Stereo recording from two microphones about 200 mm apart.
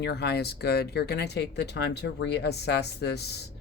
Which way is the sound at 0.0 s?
55° left (ahead or behind).